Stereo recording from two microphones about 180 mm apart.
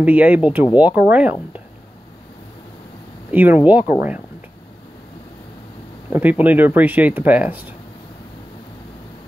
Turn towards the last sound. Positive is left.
turn(degrees=-10)  # may be behind; listen again after turning